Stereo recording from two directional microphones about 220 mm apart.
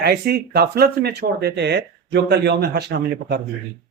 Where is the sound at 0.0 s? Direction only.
45° right (ahead or behind).